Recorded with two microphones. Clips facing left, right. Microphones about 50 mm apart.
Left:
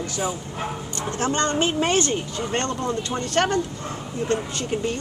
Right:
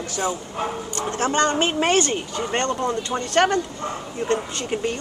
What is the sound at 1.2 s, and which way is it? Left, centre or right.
Speech, centre.